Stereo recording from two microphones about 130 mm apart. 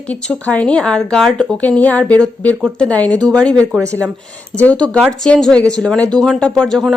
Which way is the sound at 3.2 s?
30° right (ahead or behind).